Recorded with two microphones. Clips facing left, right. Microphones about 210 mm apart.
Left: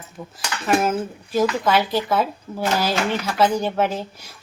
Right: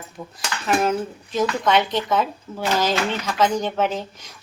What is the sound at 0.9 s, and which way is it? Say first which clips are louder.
Speech: even; 5° left (ahead or behind).